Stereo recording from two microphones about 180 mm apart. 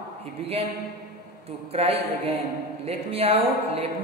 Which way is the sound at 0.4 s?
35° right (ahead or behind).